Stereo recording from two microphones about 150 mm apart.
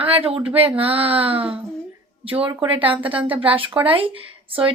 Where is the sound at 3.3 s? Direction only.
35° right (ahead or behind).